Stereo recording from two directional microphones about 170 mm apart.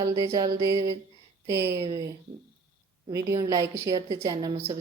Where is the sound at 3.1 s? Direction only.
25° right (ahead or behind).